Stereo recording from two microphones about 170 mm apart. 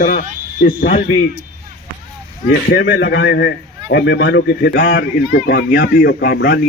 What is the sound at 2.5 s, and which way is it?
Speech, 80° left.